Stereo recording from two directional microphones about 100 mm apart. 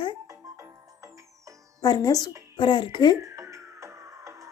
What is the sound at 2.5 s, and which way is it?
Speech, 55° left (ahead or behind).